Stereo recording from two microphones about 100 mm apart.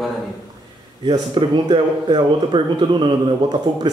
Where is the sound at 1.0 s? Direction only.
55° right (ahead or behind).